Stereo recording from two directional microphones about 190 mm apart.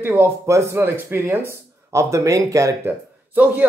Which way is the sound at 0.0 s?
10° right (ahead or behind).